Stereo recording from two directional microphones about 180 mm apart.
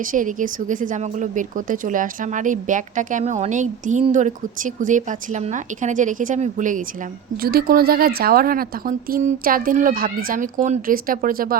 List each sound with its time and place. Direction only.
0.0 s speech: 45° right (ahead or behind)
7.4 s speech: 55° right (ahead or behind)